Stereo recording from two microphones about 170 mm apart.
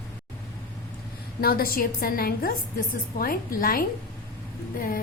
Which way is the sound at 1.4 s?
60° left (ahead or behind).